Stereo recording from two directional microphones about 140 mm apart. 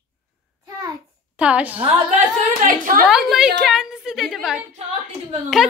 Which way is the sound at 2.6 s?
70° right (ahead or behind).